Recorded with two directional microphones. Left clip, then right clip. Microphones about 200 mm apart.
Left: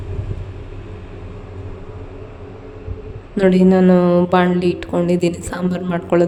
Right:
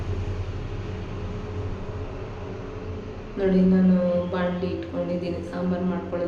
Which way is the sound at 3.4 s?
55° left (ahead or behind).